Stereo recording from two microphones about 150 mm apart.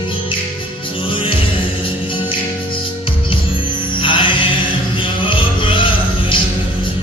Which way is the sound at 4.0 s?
35° left (ahead or behind).